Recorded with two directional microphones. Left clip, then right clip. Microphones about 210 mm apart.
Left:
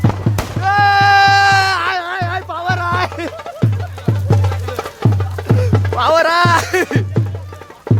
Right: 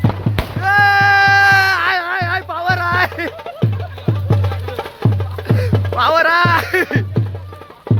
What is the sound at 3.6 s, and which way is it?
Music, 35° right (ahead or behind).